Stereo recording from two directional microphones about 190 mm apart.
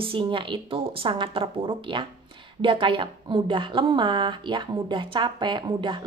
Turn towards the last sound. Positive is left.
turn(degrees=-25)  # may be behind; listen again after turning